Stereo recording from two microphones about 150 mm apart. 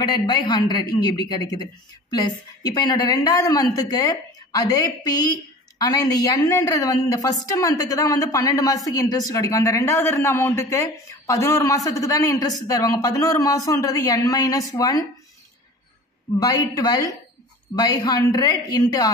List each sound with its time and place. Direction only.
0.0 s a woman's voice: 30° left (ahead or behind)
16.3 s a woman's voice: 25° left (ahead or behind)